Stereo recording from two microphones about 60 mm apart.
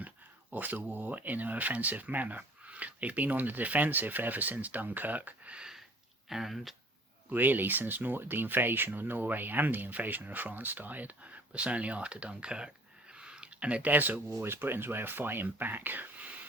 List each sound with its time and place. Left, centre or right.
0.5 s speech: right
5.5 s sniff: centre
6.2 s speech: centre
7.3 s speech: right; by 12.7 s centre
13.1 s a sound: centre
14.4 s speech: right